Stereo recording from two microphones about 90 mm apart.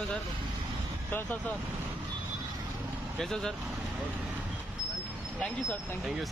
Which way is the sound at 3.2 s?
5° left (ahead or behind).